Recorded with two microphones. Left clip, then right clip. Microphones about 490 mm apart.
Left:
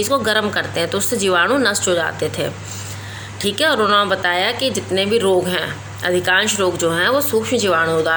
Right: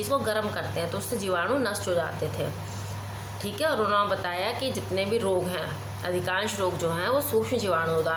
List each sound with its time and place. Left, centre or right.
0.0 s speech: right